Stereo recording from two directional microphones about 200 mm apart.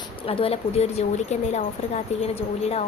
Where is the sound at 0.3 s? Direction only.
30° left (ahead or behind).